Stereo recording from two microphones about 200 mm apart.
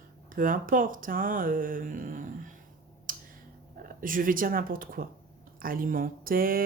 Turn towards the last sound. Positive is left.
turn(degrees=-45)  # may be behind; listen again after turning